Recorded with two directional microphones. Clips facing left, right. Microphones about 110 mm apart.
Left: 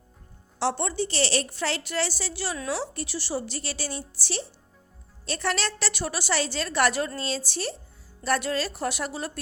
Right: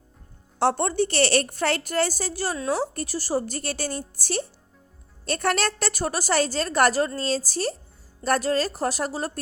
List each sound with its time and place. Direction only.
0.6 s a woman's voice: 50° right (ahead or behind)